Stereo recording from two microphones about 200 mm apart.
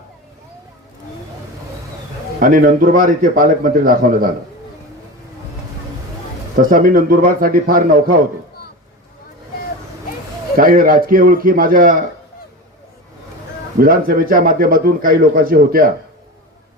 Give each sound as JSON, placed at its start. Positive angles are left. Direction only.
{"t": 2.4, "sound": "a man's voice", "side_deg": -45}
{"t": 6.6, "sound": "a man's voice", "side_deg": -45}
{"t": 10.6, "sound": "a man's voice", "side_deg": -45}
{"t": 13.7, "sound": "a man's voice", "side_deg": -45}